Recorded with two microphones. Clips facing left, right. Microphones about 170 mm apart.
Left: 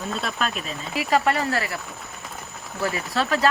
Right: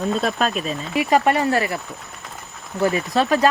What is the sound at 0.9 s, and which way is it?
Speech, 20° right (ahead or behind).